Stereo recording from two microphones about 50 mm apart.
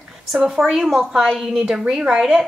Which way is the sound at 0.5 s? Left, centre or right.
Centre.